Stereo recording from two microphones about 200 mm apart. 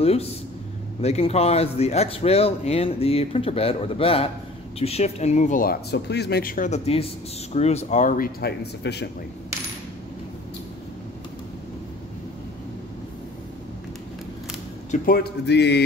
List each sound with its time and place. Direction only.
0.0 s speech: 30° left (ahead or behind); by 9.1 s 55° left (ahead or behind)
14.9 s speech: 50° left (ahead or behind)